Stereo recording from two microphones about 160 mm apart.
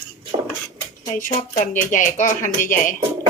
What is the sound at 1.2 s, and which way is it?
Speech, 50° left (ahead or behind).